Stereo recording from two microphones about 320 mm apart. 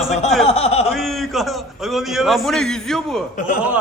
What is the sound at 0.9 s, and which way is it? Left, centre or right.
A man's voice, centre.